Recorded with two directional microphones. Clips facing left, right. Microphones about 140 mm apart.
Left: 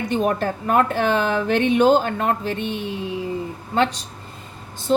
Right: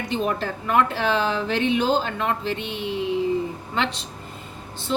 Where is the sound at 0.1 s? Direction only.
50° left (ahead or behind).